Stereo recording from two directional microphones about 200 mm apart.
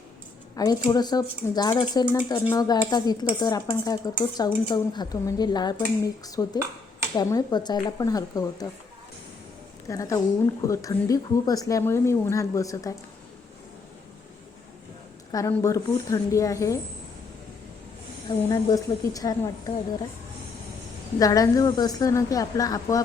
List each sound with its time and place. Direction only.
0.5 s a woman's voice: 20° left (ahead or behind)
9.9 s a woman's voice: 15° left (ahead or behind)
15.3 s a woman's voice: 20° left (ahead or behind)
18.3 s a woman's voice: 15° left (ahead or behind)
21.2 s a woman's voice: 15° left (ahead or behind)